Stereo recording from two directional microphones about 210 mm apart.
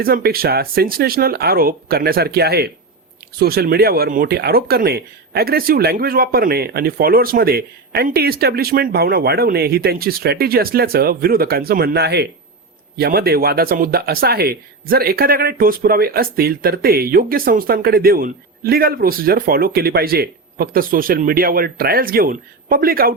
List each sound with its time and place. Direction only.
0.0 s speech: 45° right (ahead or behind)